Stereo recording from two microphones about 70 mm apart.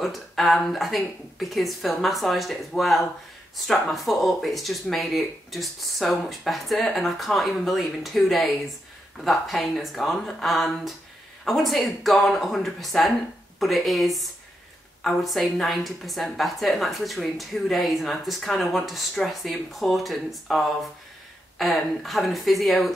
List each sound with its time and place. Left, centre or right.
0.0 s a woman's voice: centre